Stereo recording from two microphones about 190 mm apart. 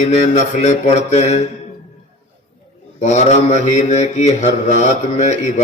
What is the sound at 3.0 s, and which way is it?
Mantra, 40° left (ahead or behind).